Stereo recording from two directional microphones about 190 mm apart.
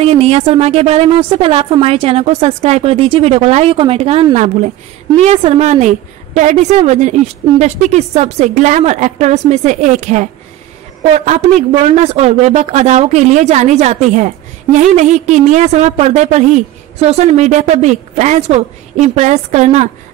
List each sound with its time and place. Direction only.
0.0 s a woman's voice: 30° right (ahead or behind)